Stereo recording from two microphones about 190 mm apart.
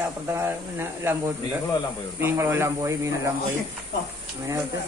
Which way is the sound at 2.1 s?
15° right (ahead or behind).